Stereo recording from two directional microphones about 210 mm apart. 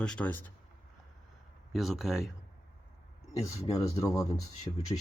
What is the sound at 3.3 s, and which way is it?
Speech, 15° left (ahead or behind).